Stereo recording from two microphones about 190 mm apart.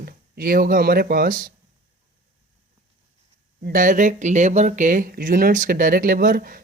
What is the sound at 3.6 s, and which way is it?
Speech, 45° right (ahead or behind).